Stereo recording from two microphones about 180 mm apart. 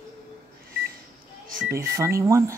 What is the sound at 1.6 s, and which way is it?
Speech, 15° right (ahead or behind).